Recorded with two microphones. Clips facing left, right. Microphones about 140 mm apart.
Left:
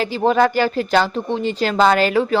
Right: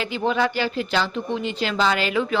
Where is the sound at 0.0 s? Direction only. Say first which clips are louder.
Left 6 dB; 35° left (ahead or behind).